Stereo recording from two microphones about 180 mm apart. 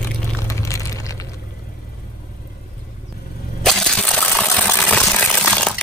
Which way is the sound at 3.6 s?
5° left (ahead or behind).